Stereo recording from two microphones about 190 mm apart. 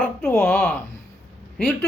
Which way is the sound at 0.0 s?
10° left (ahead or behind).